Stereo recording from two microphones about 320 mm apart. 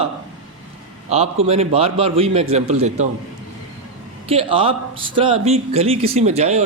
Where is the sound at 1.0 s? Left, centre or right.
Centre.